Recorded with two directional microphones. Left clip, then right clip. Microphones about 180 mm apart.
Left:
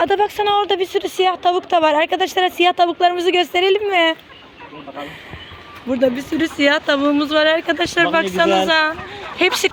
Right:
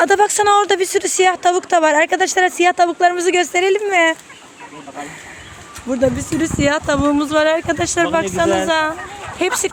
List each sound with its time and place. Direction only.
0.0 s speech: 25° right (ahead or behind); by 4.2 s 5° right (ahead or behind)
5.9 s speech: 5° right (ahead or behind)